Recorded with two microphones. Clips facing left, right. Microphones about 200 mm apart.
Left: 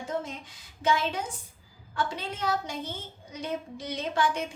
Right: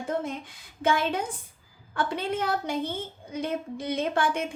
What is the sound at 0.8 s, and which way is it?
A woman's voice, 55° right (ahead or behind).